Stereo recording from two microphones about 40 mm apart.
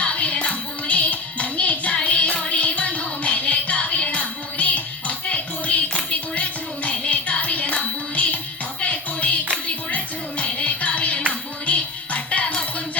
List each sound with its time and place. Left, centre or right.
0.0 s music: left
2.6 s music: left
6.1 s a sound: left
7.1 s music: left